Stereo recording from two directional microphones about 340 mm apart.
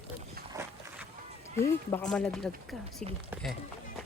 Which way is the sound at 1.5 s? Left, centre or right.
Centre.